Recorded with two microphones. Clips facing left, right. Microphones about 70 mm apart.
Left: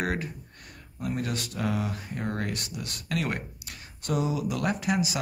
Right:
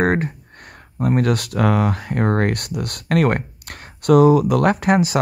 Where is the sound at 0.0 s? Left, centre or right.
Right.